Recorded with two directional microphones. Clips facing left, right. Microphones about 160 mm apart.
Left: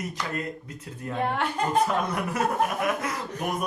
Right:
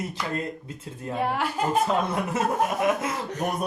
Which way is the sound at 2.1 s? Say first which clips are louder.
Right 1 dB; 25° right (ahead or behind).